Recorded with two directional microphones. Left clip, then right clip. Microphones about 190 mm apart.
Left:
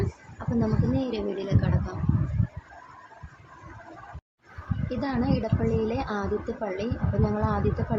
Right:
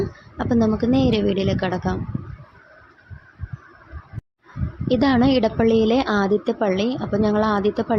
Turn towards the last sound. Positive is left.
turn(degrees=-40)  # may be behind; listen again after turning